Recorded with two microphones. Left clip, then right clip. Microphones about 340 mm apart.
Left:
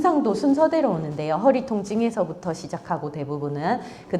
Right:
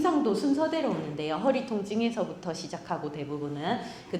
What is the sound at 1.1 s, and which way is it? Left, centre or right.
A woman's voice, left.